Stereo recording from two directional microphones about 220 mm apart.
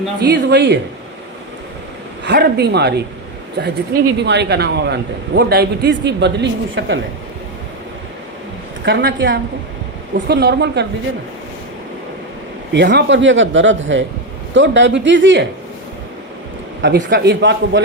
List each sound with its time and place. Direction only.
0.2 s a man's voice: 50° right (ahead or behind)
2.2 s a man's voice: 50° right (ahead or behind)
4.2 s a man's voice: 50° right (ahead or behind)
8.8 s a man's voice: 50° right (ahead or behind)
12.7 s a man's voice: 50° right (ahead or behind)
16.8 s a man's voice: 50° right (ahead or behind)